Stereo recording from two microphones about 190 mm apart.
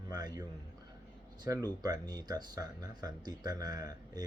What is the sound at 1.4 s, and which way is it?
Speech, 20° right (ahead or behind).